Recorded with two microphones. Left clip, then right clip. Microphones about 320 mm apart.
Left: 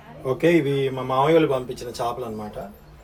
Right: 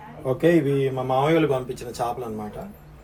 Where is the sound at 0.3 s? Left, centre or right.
Centre.